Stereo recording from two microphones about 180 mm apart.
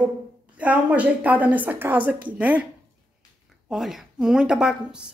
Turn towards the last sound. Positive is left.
turn(degrees=-5)  # may be behind; listen again after turning